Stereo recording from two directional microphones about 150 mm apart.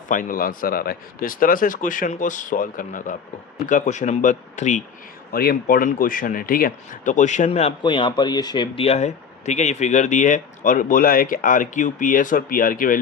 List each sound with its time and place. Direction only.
0.1 s speech: 65° left (ahead or behind)
5.3 s speech: 85° left; by 7.7 s 50° left (ahead or behind)
7.8 s speech: 30° left (ahead or behind); by 13.0 s 65° left (ahead or behind)